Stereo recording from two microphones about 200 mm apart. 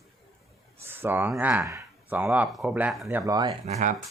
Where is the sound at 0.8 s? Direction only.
10° right (ahead or behind).